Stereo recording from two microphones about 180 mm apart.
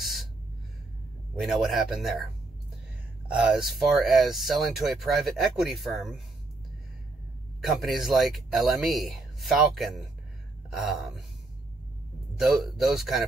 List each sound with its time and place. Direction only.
1.4 s speech: centre (ahead or behind)
3.3 s speech: 5° right (ahead or behind)
7.6 s speech: centre (ahead or behind)
12.4 s speech: centre (ahead or behind)